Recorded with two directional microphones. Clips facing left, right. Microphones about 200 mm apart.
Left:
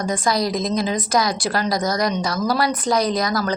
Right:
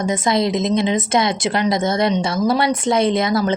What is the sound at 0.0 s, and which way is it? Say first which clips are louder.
Speech: right 3 dB; 25° right (ahead or behind).